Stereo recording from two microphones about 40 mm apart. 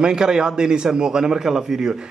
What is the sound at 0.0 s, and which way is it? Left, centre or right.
Speech, centre.